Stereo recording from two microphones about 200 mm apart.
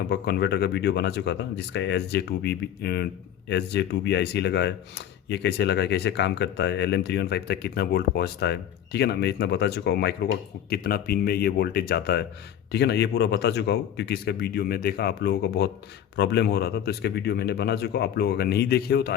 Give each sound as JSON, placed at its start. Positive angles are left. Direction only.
{"t": 0.1, "sound": "speech", "side_deg": 55}